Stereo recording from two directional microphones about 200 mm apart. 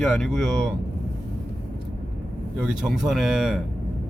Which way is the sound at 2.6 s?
Centre (ahead or behind).